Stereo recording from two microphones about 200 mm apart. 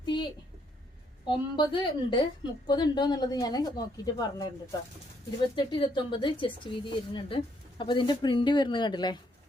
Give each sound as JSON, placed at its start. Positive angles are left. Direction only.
{"t": 0.0, "sound": "a sound", "side_deg": 20}
{"t": 1.2, "sound": "speech", "side_deg": 25}
{"t": 5.5, "sound": "speech", "side_deg": 25}